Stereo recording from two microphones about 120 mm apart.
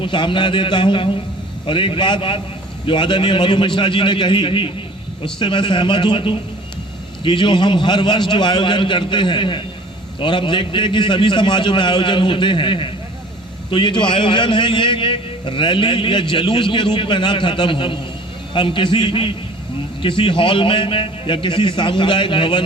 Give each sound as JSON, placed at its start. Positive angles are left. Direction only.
{"t": 0.0, "sound": "a man's voice", "side_deg": 45}